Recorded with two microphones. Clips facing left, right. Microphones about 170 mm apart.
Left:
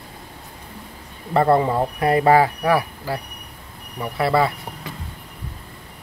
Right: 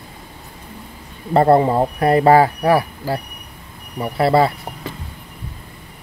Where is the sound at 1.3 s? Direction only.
35° right (ahead or behind).